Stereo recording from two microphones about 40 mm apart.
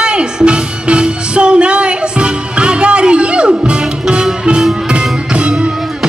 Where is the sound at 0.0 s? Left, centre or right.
Right.